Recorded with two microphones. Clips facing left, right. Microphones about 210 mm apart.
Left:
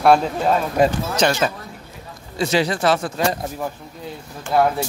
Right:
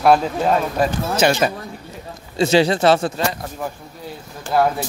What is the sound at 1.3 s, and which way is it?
A man's voice, 20° right (ahead or behind).